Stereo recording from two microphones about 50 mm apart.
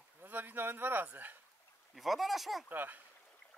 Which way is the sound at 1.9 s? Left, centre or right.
Centre.